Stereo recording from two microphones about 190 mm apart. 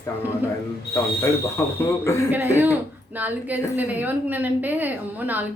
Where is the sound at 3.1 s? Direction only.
10° right (ahead or behind).